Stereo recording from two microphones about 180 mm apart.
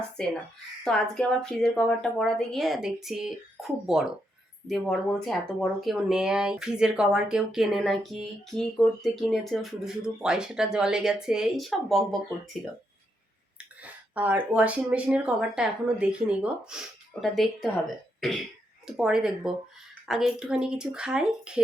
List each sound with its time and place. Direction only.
0.9 s speech: 5° left (ahead or behind)
13.8 s speech: 10° right (ahead or behind)
18.9 s speech: 5° right (ahead or behind)